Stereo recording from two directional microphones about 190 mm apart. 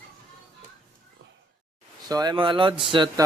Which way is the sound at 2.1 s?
20° right (ahead or behind).